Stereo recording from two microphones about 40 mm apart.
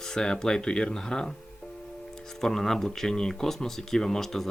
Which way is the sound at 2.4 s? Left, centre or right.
Centre.